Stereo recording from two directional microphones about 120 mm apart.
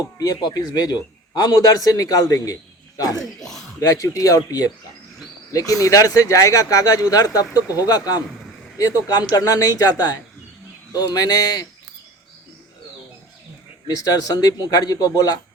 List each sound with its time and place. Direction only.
0.2 s a man's voice: 30° left (ahead or behind)
3.2 s a sound: 5° left (ahead or behind)
3.8 s a man's voice: 30° left (ahead or behind)
13.8 s speech: 30° left (ahead or behind)